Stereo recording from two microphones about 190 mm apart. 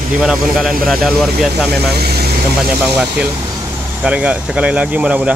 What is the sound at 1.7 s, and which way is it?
Speech, 55° right (ahead or behind).